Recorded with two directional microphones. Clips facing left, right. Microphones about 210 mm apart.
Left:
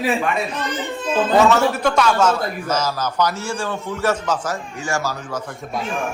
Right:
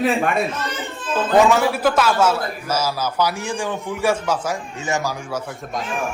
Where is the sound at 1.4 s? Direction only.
10° right (ahead or behind).